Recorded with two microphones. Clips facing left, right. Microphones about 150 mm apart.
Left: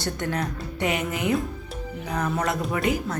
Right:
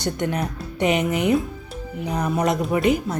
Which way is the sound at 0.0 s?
20° right (ahead or behind).